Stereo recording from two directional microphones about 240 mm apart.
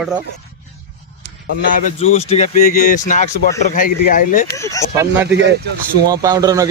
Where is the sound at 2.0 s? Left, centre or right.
Left.